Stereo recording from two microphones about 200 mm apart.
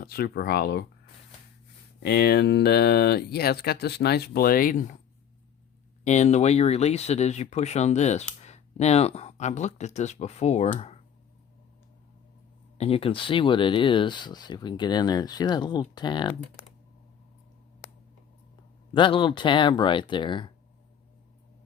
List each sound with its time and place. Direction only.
0.0 s speech: 50° left (ahead or behind)
2.0 s speech: 55° left (ahead or behind)
6.1 s speech: 35° left (ahead or behind)
12.7 s speech: 30° left (ahead or behind)
18.9 s speech: 25° left (ahead or behind)